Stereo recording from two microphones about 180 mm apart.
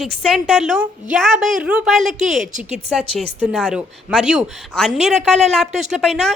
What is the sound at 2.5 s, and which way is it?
Speech, 45° right (ahead or behind).